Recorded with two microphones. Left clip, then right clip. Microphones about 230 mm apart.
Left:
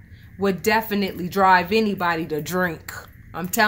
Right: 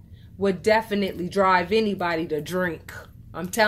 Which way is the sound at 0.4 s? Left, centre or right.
Left.